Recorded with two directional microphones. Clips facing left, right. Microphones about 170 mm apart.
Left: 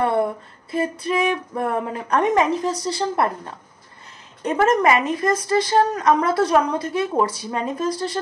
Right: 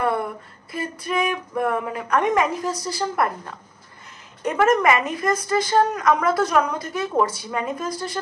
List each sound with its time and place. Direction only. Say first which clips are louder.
0.7 s a woman's voice: left 5 dB; 30° left (ahead or behind)